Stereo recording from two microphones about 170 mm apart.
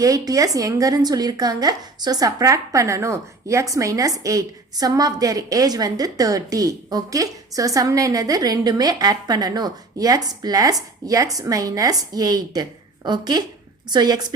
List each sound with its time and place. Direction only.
0.0 s a woman's voice: 20° right (ahead or behind)